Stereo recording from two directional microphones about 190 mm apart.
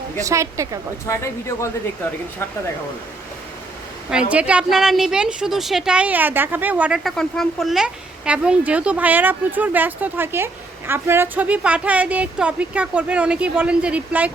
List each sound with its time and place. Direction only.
0.2 s a woman's voice: 15° right (ahead or behind)
1.0 s speech: 15° left (ahead or behind)
4.1 s a woman's voice: 5° right (ahead or behind)